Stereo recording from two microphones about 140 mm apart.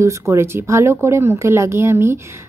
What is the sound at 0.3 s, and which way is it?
A woman's voice, 20° right (ahead or behind).